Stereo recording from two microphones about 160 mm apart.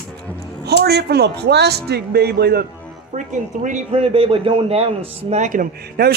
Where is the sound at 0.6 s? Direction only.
90° right.